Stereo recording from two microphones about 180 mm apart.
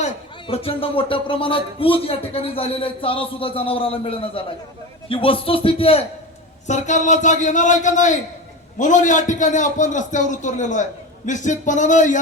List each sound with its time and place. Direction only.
0.4 s a man's voice: 30° left (ahead or behind)